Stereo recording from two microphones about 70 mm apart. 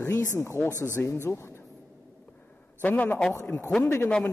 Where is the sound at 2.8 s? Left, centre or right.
Left.